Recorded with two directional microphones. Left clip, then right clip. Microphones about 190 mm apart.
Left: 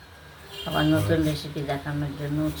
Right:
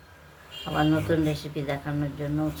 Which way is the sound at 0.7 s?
30° right (ahead or behind).